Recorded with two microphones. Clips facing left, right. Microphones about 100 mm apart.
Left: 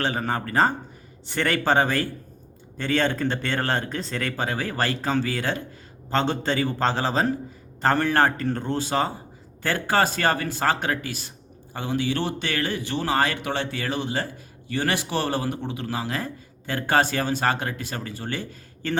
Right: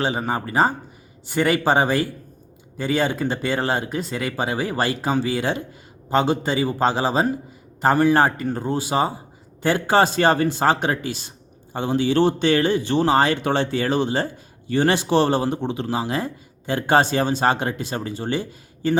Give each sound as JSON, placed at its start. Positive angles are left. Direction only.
{"t": 0.0, "sound": "speech", "side_deg": -10}